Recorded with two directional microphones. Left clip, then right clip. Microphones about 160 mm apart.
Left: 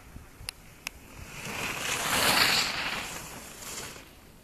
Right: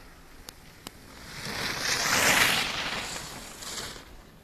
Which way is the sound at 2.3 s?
25° right (ahead or behind).